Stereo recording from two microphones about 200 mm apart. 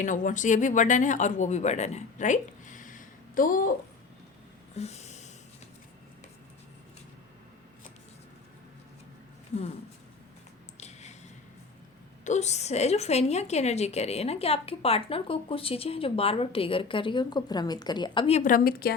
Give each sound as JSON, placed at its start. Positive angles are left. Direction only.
{"t": 0.0, "sound": "speech", "side_deg": 40}
{"t": 4.8, "sound": "snort", "side_deg": 35}
{"t": 10.8, "sound": "a sound", "side_deg": 35}
{"t": 12.2, "sound": "a woman's voice", "side_deg": 35}